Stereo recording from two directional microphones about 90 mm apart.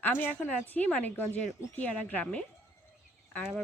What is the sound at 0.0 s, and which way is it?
A woman's voice, 20° left (ahead or behind).